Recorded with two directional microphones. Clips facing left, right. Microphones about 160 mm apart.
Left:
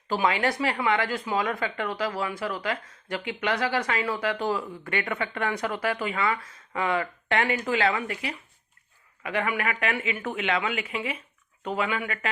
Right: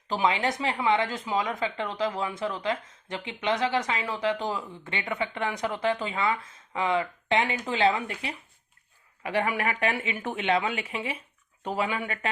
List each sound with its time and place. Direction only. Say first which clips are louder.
0.1 s a woman's voice: left 1 dB; 20° right (ahead or behind)